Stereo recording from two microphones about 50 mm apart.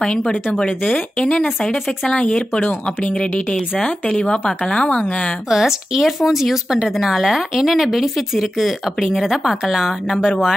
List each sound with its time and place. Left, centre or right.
0.0 s speech: centre
5.5 s speech: centre